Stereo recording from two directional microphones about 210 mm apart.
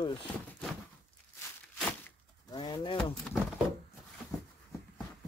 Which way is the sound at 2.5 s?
20° left (ahead or behind).